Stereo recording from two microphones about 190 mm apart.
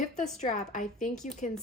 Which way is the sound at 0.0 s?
40° left (ahead or behind).